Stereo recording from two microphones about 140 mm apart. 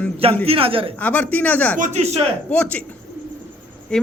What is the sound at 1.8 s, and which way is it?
Speech, 55° right (ahead or behind).